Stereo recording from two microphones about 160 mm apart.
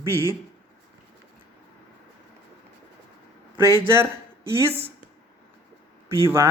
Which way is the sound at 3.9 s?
15° right (ahead or behind).